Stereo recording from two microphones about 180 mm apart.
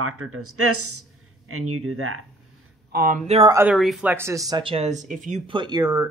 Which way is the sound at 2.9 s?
50° right (ahead or behind).